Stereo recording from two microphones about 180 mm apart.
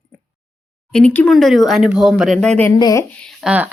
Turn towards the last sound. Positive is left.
turn(degrees=-10)  # may be behind; listen again after turning